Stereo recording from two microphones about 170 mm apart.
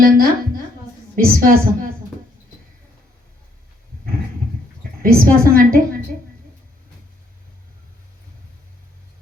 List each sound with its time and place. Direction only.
0.0 s a sound: 55° right (ahead or behind)
1.1 s a woman's voice: 55° right (ahead or behind)
4.8 s a woman's voice: 60° right (ahead or behind)